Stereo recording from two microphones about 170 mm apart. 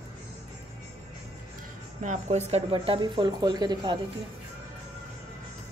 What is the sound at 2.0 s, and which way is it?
Speech, 45° right (ahead or behind).